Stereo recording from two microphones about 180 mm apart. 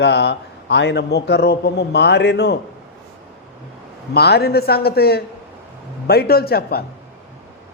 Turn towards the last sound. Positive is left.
turn(degrees=60)  # may be behind; listen again after turning